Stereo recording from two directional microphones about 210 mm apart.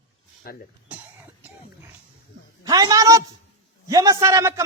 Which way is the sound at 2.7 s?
15° right (ahead or behind).